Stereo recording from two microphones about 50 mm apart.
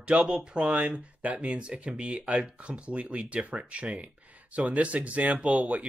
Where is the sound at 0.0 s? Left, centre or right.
Right.